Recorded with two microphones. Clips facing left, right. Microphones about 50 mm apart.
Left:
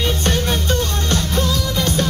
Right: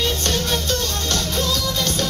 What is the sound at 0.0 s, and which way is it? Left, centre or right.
Music, centre.